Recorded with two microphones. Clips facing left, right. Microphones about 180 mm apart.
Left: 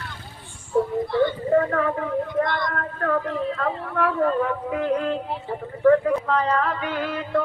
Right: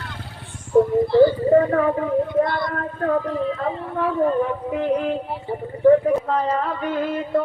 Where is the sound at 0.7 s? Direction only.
30° right (ahead or behind).